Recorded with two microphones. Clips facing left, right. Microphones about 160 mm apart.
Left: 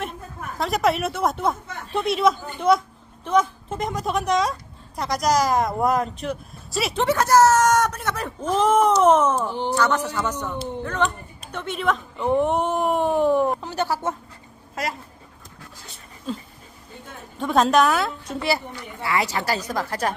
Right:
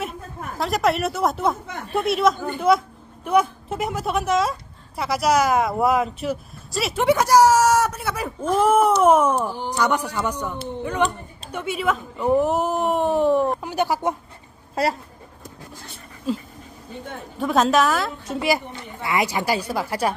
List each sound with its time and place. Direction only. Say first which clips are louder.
0.6 s a woman's voice: even; centre (ahead or behind)
7.0 s a woman's voice: right 1 dB; 10° right (ahead or behind)
13.6 s speech: right 2 dB; 10° right (ahead or behind)
14.8 s speech: right 6 dB; 30° right (ahead or behind)
16.3 s a woman's voice: right 5 dB; 5° right (ahead or behind)
18.4 s speech: right 2 dB; 15° right (ahead or behind)